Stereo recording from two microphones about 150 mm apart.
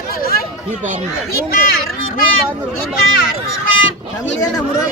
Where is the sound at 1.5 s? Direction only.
75° left (ahead or behind).